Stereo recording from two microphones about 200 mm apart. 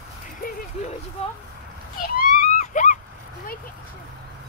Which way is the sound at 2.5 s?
40° left (ahead or behind).